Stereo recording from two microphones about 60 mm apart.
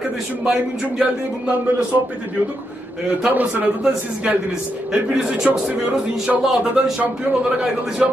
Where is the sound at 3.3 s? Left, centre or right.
Right.